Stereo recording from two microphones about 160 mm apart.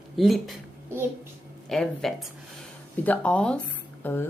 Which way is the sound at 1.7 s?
Centre (ahead or behind).